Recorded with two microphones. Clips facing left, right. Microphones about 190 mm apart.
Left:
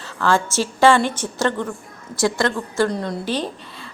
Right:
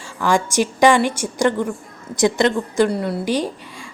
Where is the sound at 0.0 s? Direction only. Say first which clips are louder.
Right 1 dB; 15° right (ahead or behind).